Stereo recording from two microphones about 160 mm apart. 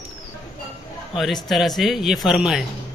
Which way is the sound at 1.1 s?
Centre (ahead or behind).